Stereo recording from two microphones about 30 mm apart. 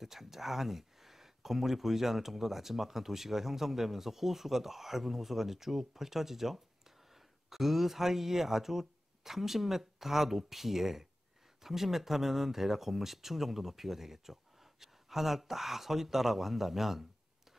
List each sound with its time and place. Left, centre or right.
0.0 s speech: centre